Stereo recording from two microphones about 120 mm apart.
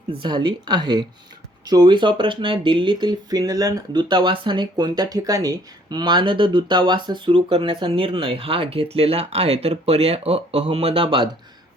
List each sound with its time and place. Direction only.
0.1 s speech: 40° right (ahead or behind)